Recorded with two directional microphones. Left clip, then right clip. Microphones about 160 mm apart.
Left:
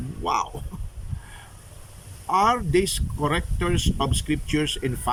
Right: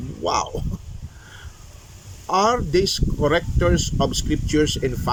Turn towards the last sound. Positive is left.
turn(degrees=10)  # may be behind; listen again after turning